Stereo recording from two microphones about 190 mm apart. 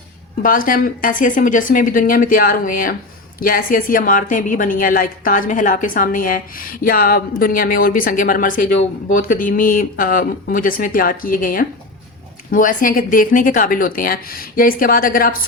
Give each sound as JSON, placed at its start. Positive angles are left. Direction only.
{"t": 0.4, "sound": "a woman's voice", "side_deg": 45}